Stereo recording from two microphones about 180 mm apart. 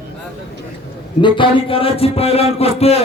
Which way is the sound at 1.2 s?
25° left (ahead or behind).